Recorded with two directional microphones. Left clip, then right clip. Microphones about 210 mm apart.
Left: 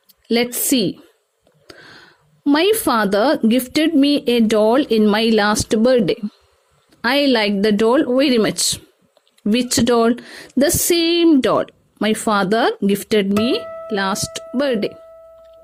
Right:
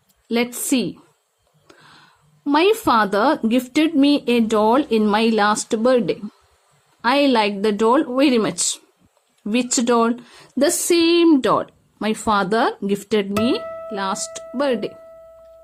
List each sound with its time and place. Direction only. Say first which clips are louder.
0.3 s a woman's voice: left 3 dB; 25° left (ahead or behind)
13.2 s speech: left 2 dB; centre (ahead or behind)
13.8 s a woman's voice: left 4 dB; 25° left (ahead or behind)